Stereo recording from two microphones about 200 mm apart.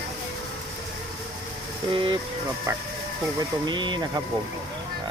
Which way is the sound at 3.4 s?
20° right (ahead or behind).